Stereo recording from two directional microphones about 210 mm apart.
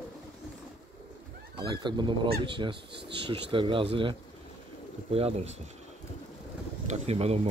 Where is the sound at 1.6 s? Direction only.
20° right (ahead or behind).